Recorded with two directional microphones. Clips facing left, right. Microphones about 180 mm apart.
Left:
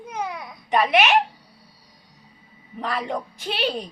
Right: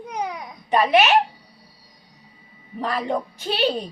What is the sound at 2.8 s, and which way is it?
Speech, 35° right (ahead or behind).